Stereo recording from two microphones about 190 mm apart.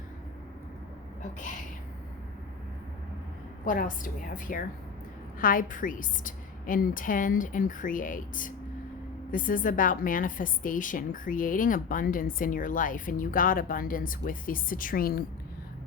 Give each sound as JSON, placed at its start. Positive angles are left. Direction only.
{"t": 3.7, "sound": "a woman's voice", "side_deg": 45}